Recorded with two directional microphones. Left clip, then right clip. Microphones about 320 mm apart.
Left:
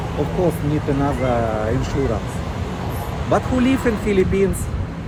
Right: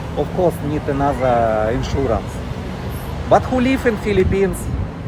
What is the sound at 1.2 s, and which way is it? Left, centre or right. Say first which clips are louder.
Speech: right 5 dB; right.